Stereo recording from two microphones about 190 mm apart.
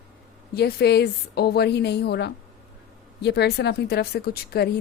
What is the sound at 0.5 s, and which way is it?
A woman's voice, 60° left (ahead or behind).